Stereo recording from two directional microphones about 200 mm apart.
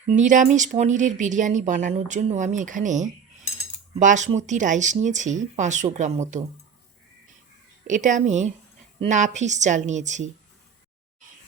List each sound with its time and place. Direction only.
0.1 s speech: 40° right (ahead or behind)
7.9 s speech: 40° right (ahead or behind)